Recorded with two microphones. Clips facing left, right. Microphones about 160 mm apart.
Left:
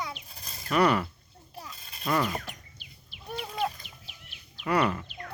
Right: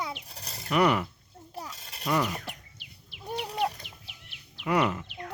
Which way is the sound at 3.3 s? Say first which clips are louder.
Right 2 dB; 70° right (ahead or behind).